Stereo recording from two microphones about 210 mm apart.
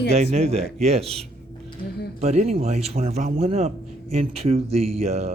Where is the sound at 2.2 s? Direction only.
30° right (ahead or behind).